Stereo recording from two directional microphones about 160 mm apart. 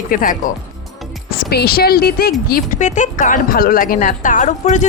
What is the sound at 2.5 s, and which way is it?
Speech, 50° left (ahead or behind).